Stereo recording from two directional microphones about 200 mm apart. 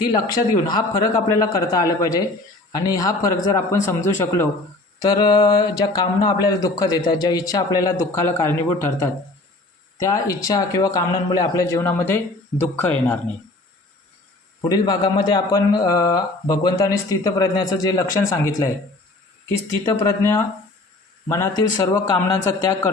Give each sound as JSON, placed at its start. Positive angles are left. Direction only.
{"t": 0.0, "sound": "a man's voice", "side_deg": 20}
{"t": 14.6, "sound": "speech", "side_deg": 20}
{"t": 19.8, "sound": "speech", "side_deg": 15}